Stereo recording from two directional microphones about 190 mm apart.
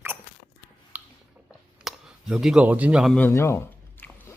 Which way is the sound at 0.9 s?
10° right (ahead or behind).